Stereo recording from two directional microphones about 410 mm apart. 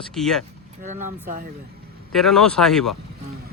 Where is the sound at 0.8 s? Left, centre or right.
Centre.